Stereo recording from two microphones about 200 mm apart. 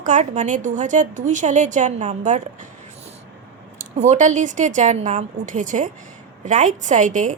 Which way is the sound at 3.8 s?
35° right (ahead or behind).